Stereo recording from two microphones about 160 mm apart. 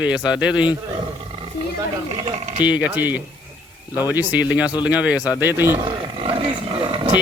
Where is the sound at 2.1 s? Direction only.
40° right (ahead or behind).